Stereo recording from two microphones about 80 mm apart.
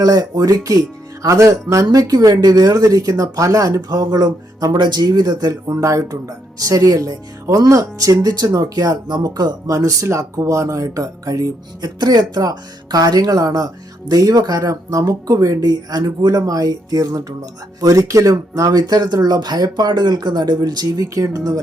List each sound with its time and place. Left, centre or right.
0.0 s speech: right
5.7 s speech: right
9.6 s speech: right
11.9 s speech: right